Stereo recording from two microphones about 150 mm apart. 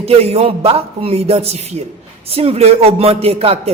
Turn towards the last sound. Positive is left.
turn(degrees=-40)  # may be behind; listen again after turning